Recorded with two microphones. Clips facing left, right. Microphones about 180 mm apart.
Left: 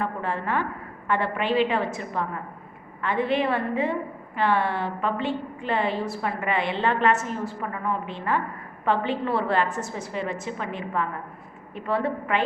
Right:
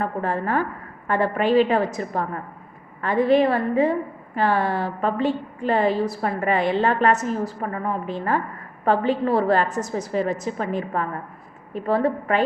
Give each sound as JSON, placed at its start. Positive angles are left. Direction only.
{"t": 0.0, "sound": "a woman's voice", "side_deg": -40}